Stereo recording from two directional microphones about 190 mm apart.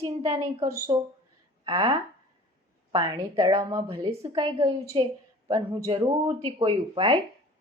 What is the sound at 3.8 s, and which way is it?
A woman's voice, 30° right (ahead or behind).